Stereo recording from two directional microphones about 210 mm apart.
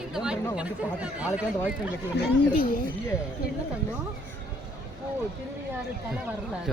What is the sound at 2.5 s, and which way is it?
Speech, 40° left (ahead or behind).